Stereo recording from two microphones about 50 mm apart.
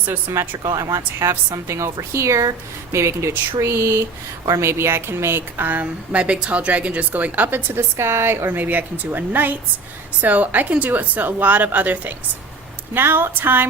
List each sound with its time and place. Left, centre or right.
0.3 s a woman's voice: right
1.3 s speech: right
5.5 s a woman's voice: right
5.8 s a woman's voice: right
7.8 s speech: right
8.4 s a woman's voice: right
12.9 s speech: right